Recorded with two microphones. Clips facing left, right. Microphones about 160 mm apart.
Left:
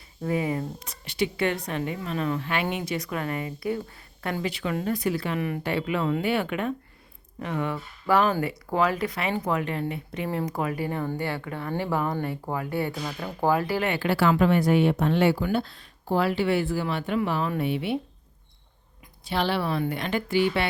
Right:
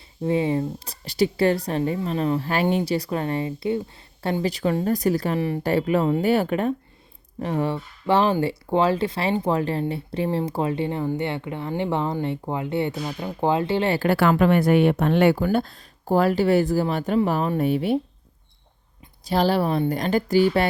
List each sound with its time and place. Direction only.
0.2 s speech: 25° right (ahead or behind)
14.1 s speech: 55° right (ahead or behind)
15.4 s speech: 45° right (ahead or behind)
19.2 s speech: 40° right (ahead or behind)